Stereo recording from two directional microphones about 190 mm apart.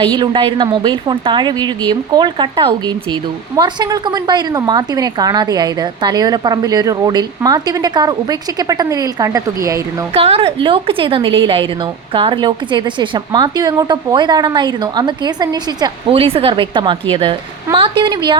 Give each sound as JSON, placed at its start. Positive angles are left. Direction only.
{"t": 0.0, "sound": "a woman's voice", "side_deg": -25}
{"t": 10.2, "sound": "a woman's voice", "side_deg": -30}